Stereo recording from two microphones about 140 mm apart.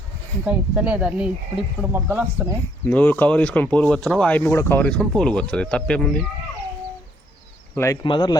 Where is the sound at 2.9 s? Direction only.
10° left (ahead or behind).